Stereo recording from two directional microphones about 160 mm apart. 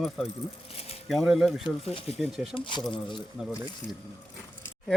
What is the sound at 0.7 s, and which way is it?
Speech, 40° left (ahead or behind).